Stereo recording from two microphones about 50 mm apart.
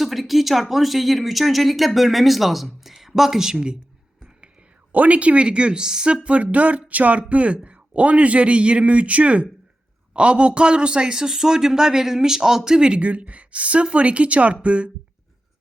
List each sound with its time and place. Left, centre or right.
0.0 s speech: centre
4.9 s a man's voice: right; by 6.1 s centre
6.2 s a man's voice: right